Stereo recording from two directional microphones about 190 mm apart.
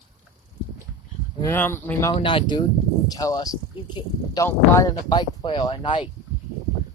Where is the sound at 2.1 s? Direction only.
25° left (ahead or behind).